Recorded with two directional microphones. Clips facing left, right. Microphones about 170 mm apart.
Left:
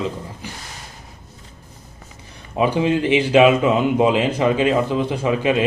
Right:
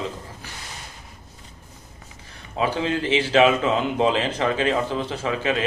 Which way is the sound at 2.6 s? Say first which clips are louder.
Left 6 dB; 15° left (ahead or behind).